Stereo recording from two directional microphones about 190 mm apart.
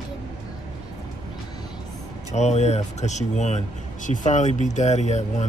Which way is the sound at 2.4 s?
35° left (ahead or behind).